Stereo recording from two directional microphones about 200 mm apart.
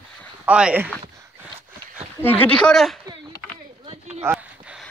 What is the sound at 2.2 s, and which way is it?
Speech, 10° left (ahead or behind).